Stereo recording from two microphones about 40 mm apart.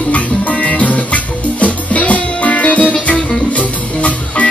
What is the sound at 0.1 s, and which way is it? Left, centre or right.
Music, left.